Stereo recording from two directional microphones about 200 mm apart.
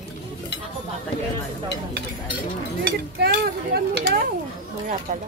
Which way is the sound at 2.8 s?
55° right (ahead or behind).